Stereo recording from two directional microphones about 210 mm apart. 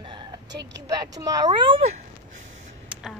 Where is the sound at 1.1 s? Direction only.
20° right (ahead or behind).